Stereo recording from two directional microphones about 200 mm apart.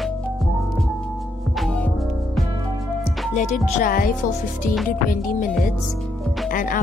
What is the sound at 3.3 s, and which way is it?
Speech, 35° left (ahead or behind).